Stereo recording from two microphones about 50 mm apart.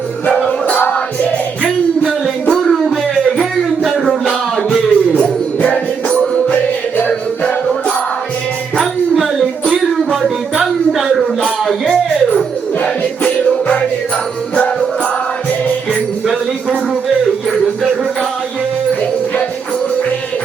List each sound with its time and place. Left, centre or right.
0.3 s music: centre
2.5 s music: centre
4.3 s music: centre
8.8 s music: centre
12.8 s music: left